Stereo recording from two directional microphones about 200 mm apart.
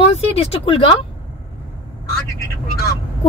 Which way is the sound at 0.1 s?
30° left (ahead or behind).